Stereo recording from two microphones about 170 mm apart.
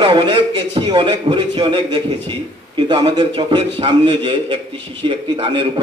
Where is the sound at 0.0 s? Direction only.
30° right (ahead or behind).